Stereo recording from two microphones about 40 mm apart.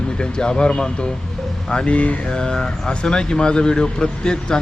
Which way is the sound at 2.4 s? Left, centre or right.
Left.